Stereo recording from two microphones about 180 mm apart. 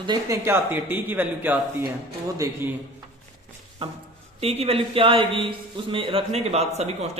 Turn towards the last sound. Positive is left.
turn(degrees=-35)  # may be behind; listen again after turning